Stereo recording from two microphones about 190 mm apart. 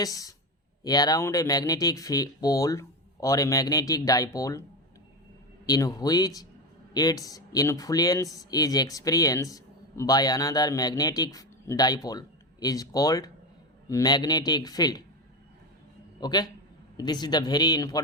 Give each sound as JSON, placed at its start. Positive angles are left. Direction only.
{"t": 0.0, "sound": "speech", "side_deg": 20}
{"t": 5.6, "sound": "speech", "side_deg": 20}
{"t": 16.2, "sound": "speech", "side_deg": 20}